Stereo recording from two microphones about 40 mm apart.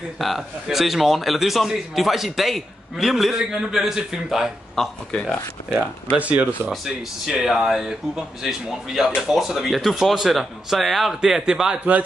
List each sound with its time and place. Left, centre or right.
0.2 s a man's voice: centre
6.1 s a man's voice: right
6.7 s a man's voice: centre
11.1 s a man's voice: centre
11.7 s a man's voice: right